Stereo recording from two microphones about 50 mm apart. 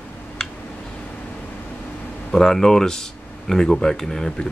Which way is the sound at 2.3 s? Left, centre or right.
Centre.